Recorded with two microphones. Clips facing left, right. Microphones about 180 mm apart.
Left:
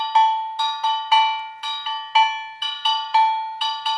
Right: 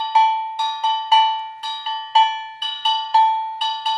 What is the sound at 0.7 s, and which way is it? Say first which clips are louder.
Cowbell: right 2 dB; 20° right (ahead or behind).